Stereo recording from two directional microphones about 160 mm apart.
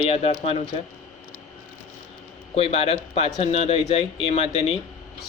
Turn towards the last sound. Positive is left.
turn(degrees=40)  # may be behind; listen again after turning